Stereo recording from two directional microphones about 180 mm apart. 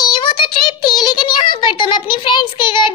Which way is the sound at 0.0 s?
25° left (ahead or behind).